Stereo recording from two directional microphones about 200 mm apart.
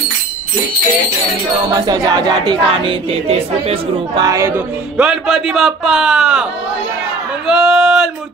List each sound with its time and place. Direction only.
1.9 s speech: 20° right (ahead or behind)
4.2 s speech: 15° right (ahead or behind)
7.4 s a sound: centre (ahead or behind)